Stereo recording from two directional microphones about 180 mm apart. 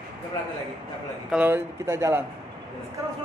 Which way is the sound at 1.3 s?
10° right (ahead or behind).